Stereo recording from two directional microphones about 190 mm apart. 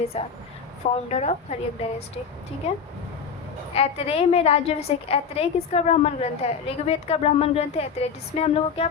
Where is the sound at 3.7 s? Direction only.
30° left (ahead or behind).